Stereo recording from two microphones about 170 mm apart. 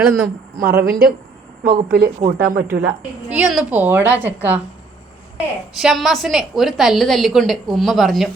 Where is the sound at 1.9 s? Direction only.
60° right (ahead or behind).